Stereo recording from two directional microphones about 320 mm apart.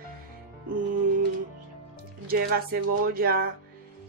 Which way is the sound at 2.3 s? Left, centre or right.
Right.